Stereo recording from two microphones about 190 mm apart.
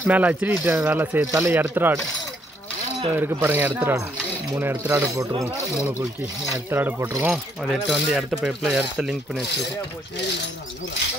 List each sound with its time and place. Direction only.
0.0 s speech: 10° right (ahead or behind)
3.2 s speech: 10° right (ahead or behind)
5.8 s speech: 5° right (ahead or behind)
7.6 s speech: centre (ahead or behind)